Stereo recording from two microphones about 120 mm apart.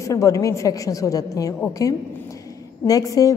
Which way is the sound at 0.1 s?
25° left (ahead or behind).